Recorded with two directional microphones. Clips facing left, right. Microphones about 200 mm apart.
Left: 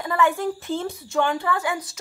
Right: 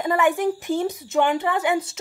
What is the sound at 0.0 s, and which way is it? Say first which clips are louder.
A woman's voice: right 2 dB; 20° right (ahead or behind).